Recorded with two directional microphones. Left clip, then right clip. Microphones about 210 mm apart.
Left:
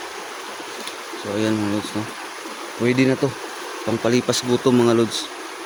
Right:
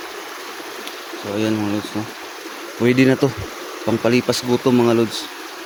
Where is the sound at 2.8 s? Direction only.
20° right (ahead or behind).